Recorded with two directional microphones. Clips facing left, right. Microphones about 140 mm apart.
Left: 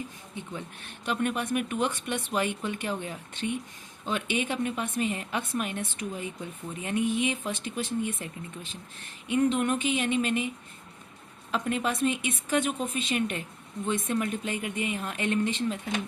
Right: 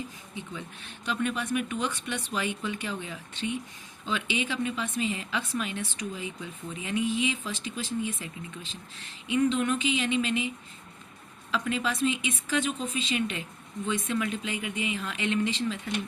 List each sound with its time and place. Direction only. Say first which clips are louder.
0.3 s a woman's voice: left 1 dB; 50° left (ahead or behind)
11.5 s a woman's voice: left 1 dB; 55° left (ahead or behind)